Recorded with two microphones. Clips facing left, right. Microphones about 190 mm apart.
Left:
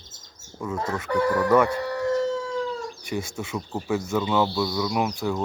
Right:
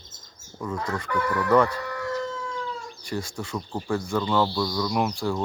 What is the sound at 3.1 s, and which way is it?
Speech, 25° left (ahead or behind).